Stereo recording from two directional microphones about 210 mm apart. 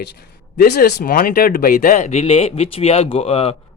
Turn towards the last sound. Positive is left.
turn(degrees=25)  # may be behind; listen again after turning